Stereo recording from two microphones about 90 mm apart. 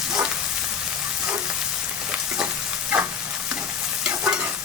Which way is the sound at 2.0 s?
10° right (ahead or behind).